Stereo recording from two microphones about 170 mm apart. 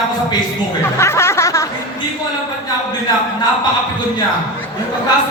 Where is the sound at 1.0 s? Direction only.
15° left (ahead or behind).